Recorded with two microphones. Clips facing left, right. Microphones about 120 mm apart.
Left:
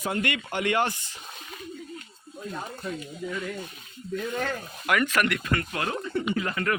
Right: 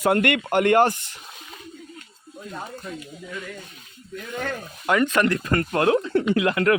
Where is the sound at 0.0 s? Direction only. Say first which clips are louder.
Right 9 dB; 60° right (ahead or behind).